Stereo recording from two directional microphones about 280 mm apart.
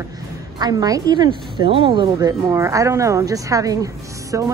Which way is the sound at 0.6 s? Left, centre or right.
Centre.